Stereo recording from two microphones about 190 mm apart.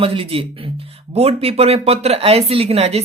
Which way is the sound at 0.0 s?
30° right (ahead or behind).